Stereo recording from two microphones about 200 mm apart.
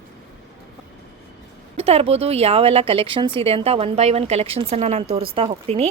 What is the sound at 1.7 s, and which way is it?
Speech, 30° right (ahead or behind).